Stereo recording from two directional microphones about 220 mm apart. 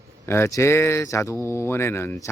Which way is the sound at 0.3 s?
10° left (ahead or behind).